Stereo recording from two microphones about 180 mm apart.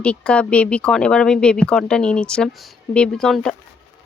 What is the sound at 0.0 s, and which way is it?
Speech, 5° left (ahead or behind).